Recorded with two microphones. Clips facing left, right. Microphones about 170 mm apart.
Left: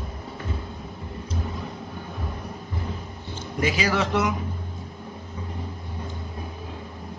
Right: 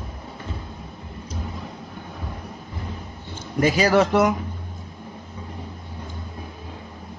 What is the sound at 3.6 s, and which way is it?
Speech, 45° right (ahead or behind).